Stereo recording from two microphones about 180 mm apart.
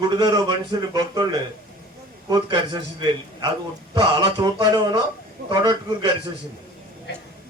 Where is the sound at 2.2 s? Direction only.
25° right (ahead or behind).